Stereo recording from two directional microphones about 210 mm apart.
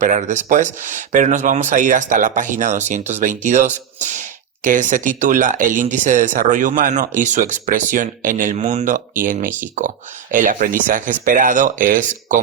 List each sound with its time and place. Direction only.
0.0 s speech: 35° right (ahead or behind)